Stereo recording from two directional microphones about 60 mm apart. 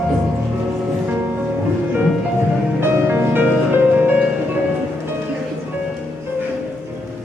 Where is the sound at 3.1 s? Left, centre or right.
Right.